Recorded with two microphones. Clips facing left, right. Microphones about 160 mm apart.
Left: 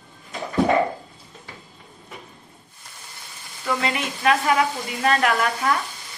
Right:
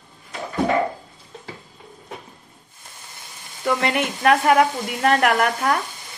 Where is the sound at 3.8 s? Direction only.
55° right (ahead or behind).